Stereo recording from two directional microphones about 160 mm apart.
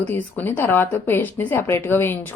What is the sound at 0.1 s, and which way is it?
A woman's voice, 10° left (ahead or behind).